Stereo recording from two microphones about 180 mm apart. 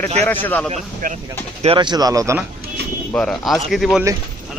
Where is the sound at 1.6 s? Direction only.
30° right (ahead or behind).